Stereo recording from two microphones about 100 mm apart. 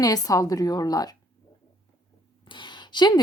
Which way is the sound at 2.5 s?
50° left (ahead or behind).